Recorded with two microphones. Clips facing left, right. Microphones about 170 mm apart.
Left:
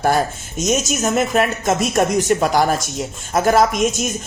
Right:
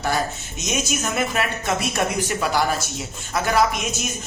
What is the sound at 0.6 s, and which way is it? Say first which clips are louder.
Speech: left 7 dB; 45° left (ahead or behind).